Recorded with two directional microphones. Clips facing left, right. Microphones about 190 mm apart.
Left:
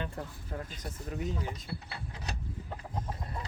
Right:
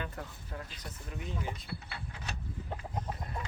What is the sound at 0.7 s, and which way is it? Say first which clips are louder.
Speech: left 5 dB; 45° left (ahead or behind).